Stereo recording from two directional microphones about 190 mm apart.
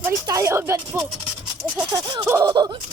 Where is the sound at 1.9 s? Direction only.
20° right (ahead or behind).